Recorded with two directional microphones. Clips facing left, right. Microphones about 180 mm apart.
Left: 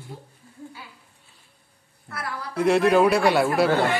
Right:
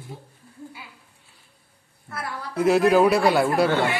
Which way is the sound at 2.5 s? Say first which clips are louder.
Right 1 dB; centre (ahead or behind).